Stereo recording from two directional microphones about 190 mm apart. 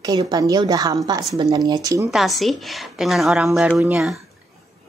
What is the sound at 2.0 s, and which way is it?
Speech, centre (ahead or behind).